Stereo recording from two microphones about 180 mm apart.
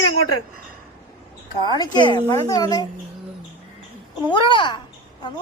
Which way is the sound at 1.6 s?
25° left (ahead or behind).